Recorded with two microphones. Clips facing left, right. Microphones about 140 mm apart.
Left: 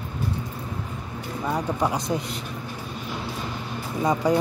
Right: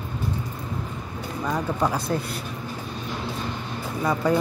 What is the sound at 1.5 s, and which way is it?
Speech, 15° left (ahead or behind).